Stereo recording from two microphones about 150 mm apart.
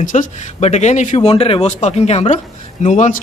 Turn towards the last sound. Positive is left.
turn(degrees=55)  # may be behind; listen again after turning